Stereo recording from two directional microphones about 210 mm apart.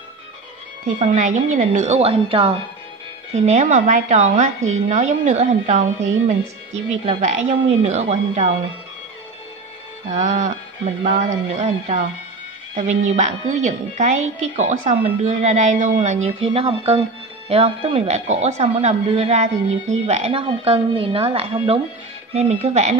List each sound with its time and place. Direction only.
0.8 s a woman's voice: 35° right (ahead or behind)
10.1 s a woman's voice: 35° right (ahead or behind)